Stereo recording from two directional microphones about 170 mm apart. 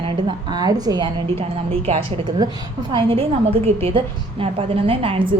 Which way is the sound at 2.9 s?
35° right (ahead or behind).